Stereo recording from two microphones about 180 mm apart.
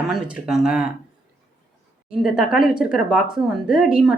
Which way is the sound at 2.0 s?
5° right (ahead or behind).